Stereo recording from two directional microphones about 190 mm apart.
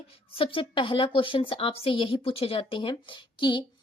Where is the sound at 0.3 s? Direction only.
25° left (ahead or behind).